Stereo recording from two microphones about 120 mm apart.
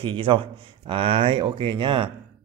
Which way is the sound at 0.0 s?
45° right (ahead or behind).